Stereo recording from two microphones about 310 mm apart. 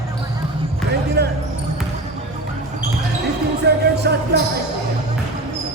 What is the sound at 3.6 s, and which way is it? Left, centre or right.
Music, right.